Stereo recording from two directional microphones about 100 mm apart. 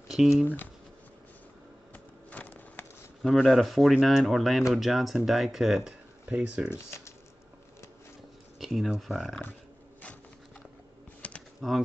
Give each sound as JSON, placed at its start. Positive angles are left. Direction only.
{"t": 0.1, "sound": "speech", "side_deg": -5}
{"t": 2.3, "sound": "a sound", "side_deg": 15}
{"t": 3.2, "sound": "speech", "side_deg": 0}
{"t": 8.5, "sound": "speech", "side_deg": 0}
{"t": 11.2, "sound": "typing", "side_deg": 15}
{"t": 11.6, "sound": "speech", "side_deg": 5}